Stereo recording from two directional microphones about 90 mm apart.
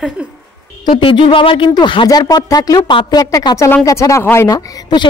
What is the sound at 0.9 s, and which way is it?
Speech, 70° left (ahead or behind).